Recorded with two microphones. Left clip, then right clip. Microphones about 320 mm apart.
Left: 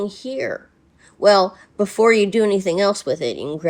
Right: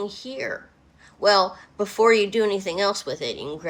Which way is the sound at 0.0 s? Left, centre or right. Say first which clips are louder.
Left 5 dB; left.